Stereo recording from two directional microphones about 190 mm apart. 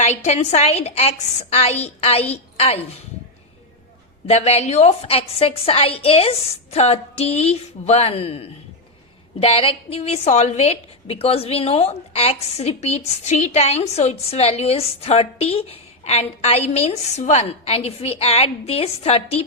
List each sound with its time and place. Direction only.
0.0 s a woman's voice: 35° left (ahead or behind)
4.3 s a woman's voice: 35° left (ahead or behind)